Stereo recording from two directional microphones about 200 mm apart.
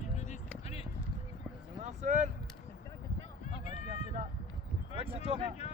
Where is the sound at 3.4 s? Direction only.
35° left (ahead or behind).